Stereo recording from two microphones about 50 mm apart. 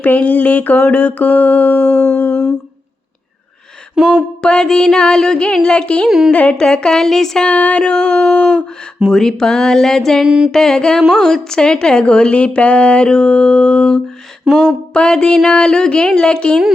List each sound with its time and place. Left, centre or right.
0.0 s mantra: left
3.9 s a sound: centre
4.4 s music: centre
5.6 s a woman's voice: centre
6.1 s speech: centre
6.3 s a woman's voice: left
6.6 s music: centre
7.4 s a woman's voice: left
9.0 s music: centre
10.2 s speech: centre
10.5 s music: centre
11.2 s a woman's voice: centre
14.5 s a sound: centre
14.9 s music: centre